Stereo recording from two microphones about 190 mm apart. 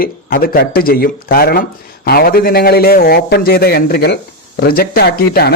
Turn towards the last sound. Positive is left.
turn(degrees=55)  # may be behind; listen again after turning